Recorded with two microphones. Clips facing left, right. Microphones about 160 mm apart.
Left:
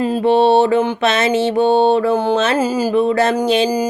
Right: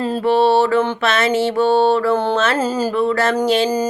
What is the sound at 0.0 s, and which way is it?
Mantra, 15° left (ahead or behind).